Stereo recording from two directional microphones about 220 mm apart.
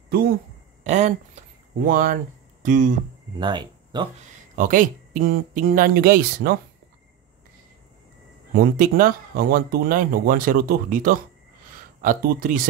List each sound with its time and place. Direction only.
0.1 s a man's voice: 45° right (ahead or behind)
0.8 s speech: 30° right (ahead or behind)
3.3 s speech: 20° right (ahead or behind)
4.6 s speech: 35° right (ahead or behind)
8.5 s speech: 40° right (ahead or behind)